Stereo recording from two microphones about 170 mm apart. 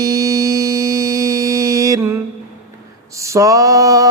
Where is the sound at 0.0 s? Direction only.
20° right (ahead or behind).